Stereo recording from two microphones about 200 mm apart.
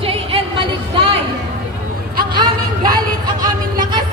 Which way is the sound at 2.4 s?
20° right (ahead or behind).